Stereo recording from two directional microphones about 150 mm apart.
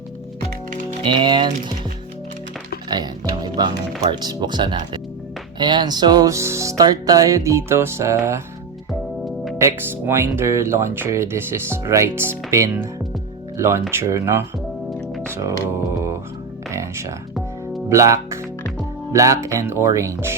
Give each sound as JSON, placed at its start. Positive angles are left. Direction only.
{"t": 1.0, "sound": "speech", "side_deg": -30}
{"t": 2.9, "sound": "speech", "side_deg": -30}
{"t": 9.6, "sound": "speech", "side_deg": -15}
{"t": 15.3, "sound": "music", "side_deg": -20}
{"t": 17.8, "sound": "speech", "side_deg": -20}